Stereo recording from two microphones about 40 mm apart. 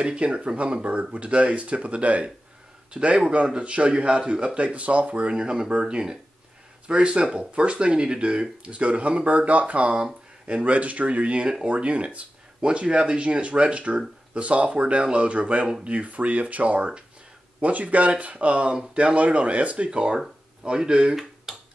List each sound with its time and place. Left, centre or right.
0.0 s a man's voice: right
5.3 s speech: right
21.5 s finger snapping: centre